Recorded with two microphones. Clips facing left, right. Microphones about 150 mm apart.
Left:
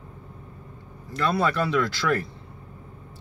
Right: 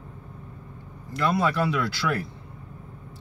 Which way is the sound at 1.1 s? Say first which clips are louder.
Even; 10° right (ahead or behind).